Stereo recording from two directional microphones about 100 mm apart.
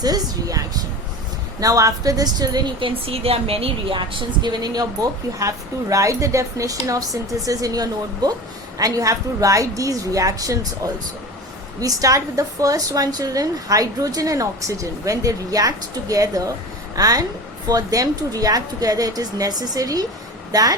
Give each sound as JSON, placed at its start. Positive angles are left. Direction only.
{"t": 0.0, "sound": "a woman's voice", "side_deg": -40}
{"t": 2.8, "sound": "a woman's voice", "side_deg": -75}
{"t": 11.8, "sound": "a woman's voice", "side_deg": -35}